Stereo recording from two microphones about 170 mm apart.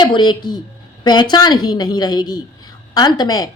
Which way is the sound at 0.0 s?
25° left (ahead or behind).